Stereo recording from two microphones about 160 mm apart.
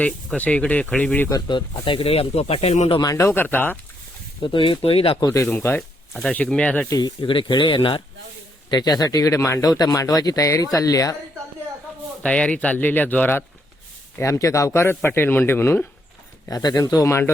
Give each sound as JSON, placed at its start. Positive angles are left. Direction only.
{"t": 0.0, "sound": "speech", "side_deg": 10}
{"t": 1.3, "sound": "speech", "side_deg": 30}
{"t": 3.0, "sound": "speech", "side_deg": 20}
{"t": 4.4, "sound": "speech", "side_deg": 30}
{"t": 5.3, "sound": "speech", "side_deg": 15}
{"t": 6.9, "sound": "speech", "side_deg": 30}
{"t": 12.2, "sound": "speech", "side_deg": 5}